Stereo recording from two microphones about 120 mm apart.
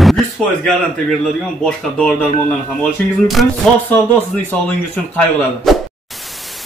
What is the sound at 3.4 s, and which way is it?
Speech, centre (ahead or behind).